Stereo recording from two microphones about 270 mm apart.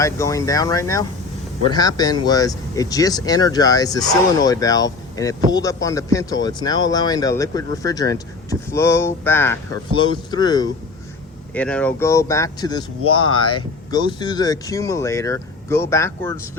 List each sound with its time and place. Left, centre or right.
0.0 s speech: centre